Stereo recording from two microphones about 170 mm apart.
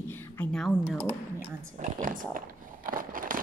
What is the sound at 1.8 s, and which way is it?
Speech, 50° right (ahead or behind).